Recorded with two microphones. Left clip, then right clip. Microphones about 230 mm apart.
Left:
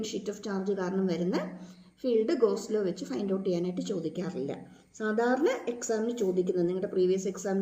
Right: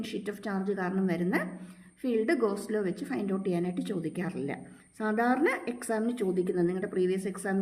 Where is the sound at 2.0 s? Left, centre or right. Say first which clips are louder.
Left 2 dB; right.